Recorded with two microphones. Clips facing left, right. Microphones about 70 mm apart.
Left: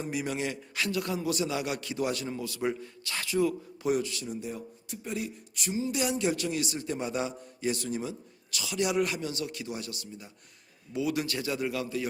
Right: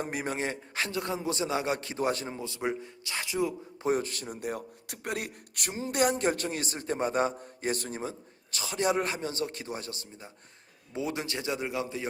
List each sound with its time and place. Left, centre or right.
0.0 s a man's voice: right; by 3.5 s centre
3.8 s a man's voice: right